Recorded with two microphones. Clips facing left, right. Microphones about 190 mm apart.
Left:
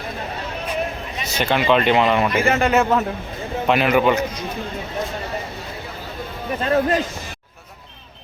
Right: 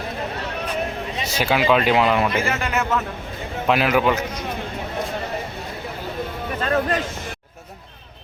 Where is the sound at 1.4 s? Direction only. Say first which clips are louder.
Left 1 dB; 5° right (ahead or behind).